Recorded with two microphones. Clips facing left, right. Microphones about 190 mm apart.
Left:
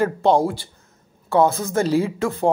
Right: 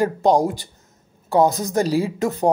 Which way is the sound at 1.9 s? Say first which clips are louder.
Left 1 dB; 35° right (ahead or behind).